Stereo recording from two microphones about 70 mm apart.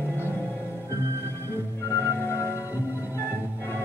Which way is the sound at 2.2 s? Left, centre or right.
Left.